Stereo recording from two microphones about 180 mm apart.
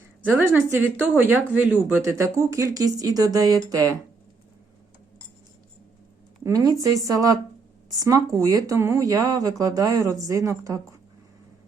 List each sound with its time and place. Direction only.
0.3 s speech: 15° right (ahead or behind)
6.4 s speech: 20° right (ahead or behind)